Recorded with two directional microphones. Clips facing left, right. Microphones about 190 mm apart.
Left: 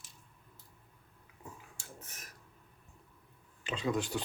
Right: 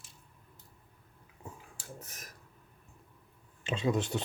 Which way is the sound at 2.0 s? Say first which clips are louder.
Right 3 dB; 40° right (ahead or behind).